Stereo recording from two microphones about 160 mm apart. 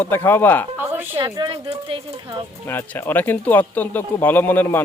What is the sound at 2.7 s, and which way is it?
A man's voice, 15° left (ahead or behind).